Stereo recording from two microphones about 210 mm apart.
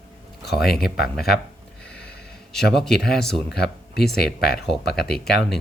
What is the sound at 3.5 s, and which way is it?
Speech, 50° left (ahead or behind).